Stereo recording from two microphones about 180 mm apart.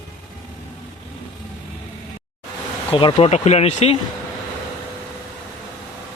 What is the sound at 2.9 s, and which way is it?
Speech, 30° left (ahead or behind).